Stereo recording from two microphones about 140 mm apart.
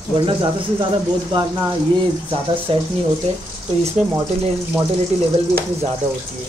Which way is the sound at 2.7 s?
40° right (ahead or behind).